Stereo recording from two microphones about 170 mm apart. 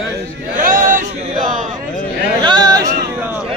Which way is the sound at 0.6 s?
50° right (ahead or behind).